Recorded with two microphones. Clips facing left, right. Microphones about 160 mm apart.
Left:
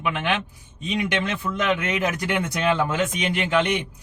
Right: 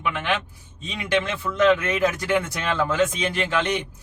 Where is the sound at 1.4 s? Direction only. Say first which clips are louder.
Right 5 dB; 15° left (ahead or behind).